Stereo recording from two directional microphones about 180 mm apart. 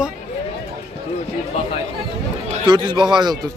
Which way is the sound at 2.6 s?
25° right (ahead or behind).